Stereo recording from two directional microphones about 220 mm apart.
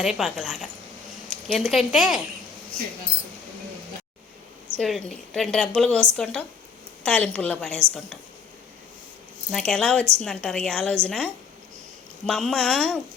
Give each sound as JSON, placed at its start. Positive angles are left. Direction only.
{"t": 0.0, "sound": "a woman's voice", "side_deg": 0}
{"t": 4.8, "sound": "a woman's voice", "side_deg": 0}
{"t": 9.5, "sound": "a woman's voice", "side_deg": 5}